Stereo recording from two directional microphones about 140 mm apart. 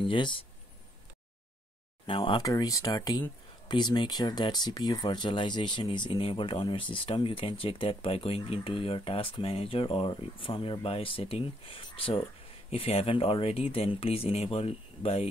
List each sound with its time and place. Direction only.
0.0 s speech: 35° left (ahead or behind)
2.0 s speech: 35° left (ahead or behind)